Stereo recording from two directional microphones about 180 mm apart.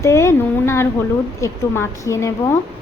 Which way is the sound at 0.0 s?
15° left (ahead or behind).